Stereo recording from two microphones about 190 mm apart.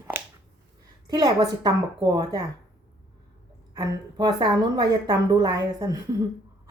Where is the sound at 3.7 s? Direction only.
20° right (ahead or behind).